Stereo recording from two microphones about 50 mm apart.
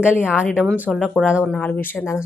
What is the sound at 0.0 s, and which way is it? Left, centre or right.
Speech, right.